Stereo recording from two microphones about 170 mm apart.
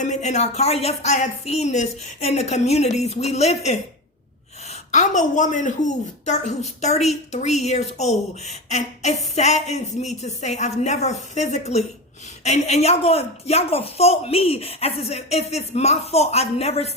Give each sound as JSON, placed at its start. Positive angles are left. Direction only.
{"t": 0.0, "sound": "a woman's voice", "side_deg": 45}